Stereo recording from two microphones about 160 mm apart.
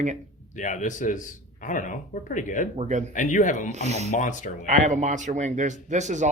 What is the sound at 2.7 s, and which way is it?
Speech, 45° right (ahead or behind).